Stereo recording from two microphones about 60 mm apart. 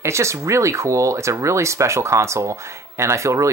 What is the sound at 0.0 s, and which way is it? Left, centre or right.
Speech, right.